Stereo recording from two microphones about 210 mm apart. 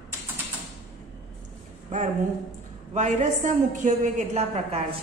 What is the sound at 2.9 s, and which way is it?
A woman's voice, 35° right (ahead or behind).